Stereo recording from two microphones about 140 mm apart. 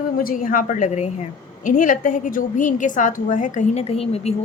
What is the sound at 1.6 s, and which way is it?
A woman's voice, 70° left (ahead or behind).